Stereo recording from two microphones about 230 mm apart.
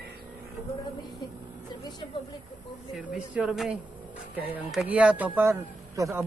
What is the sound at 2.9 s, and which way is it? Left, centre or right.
Speech, centre.